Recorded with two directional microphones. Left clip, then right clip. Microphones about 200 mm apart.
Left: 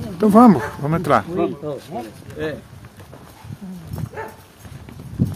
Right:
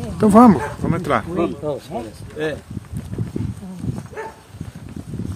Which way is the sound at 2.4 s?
40° right (ahead or behind).